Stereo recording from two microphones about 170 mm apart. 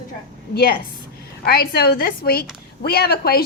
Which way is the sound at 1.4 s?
65° left (ahead or behind).